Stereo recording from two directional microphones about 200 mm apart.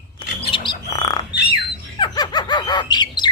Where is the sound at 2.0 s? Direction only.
20° left (ahead or behind).